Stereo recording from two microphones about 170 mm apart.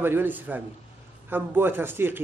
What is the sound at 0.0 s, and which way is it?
A man's voice, 10° right (ahead or behind).